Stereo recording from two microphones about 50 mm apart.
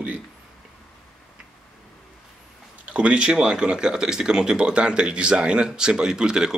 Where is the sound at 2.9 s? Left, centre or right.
Right.